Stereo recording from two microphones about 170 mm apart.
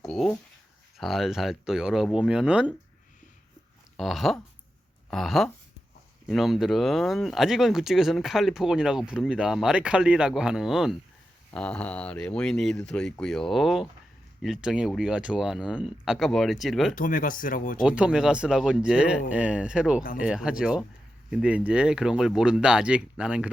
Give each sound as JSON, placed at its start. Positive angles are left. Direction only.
{"t": 0.0, "sound": "a sound", "side_deg": 5}
{"t": 0.9, "sound": "speech", "side_deg": 0}
{"t": 3.9, "sound": "speech", "side_deg": 0}
{"t": 16.9, "sound": "speech", "side_deg": 50}
{"t": 17.8, "sound": "speech", "side_deg": -5}